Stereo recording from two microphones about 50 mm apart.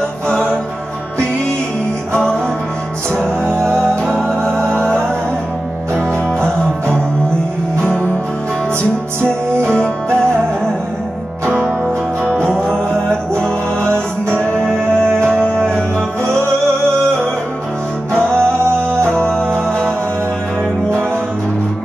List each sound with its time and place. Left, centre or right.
4.4 s music: right
5.9 s music: centre
10.2 s music: centre
14.3 s music: left
18.1 s music: centre